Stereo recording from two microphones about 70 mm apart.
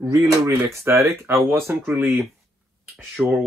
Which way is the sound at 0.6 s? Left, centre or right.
Right.